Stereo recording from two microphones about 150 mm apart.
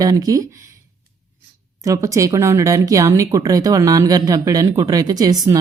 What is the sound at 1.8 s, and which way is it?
Speech, 20° right (ahead or behind).